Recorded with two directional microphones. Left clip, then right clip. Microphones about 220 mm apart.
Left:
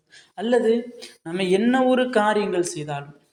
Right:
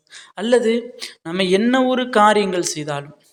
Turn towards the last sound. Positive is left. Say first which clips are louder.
# right 3 dB
turn(degrees=-25)  # may be behind; listen again after turning